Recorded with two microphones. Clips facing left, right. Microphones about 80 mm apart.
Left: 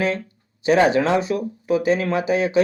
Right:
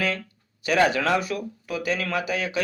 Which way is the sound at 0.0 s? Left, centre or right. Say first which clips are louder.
Left 5 dB; left.